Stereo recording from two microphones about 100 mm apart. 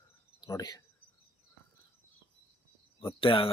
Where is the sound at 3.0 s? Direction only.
60° left (ahead or behind).